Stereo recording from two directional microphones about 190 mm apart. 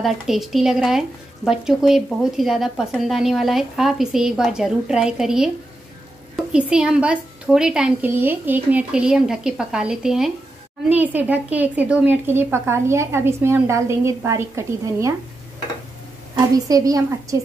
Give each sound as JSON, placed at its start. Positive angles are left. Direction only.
{"t": 0.0, "sound": "a woman's voice", "side_deg": 0}
{"t": 16.3, "sound": "a woman's voice", "side_deg": -20}